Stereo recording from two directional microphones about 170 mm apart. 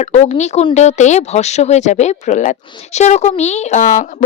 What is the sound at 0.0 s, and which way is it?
Speech, 40° left (ahead or behind).